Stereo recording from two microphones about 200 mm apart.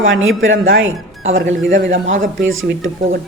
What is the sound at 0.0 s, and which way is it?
Speech, 75° right (ahead or behind).